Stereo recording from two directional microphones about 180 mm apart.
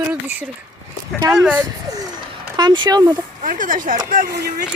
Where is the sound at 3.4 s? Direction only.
50° right (ahead or behind).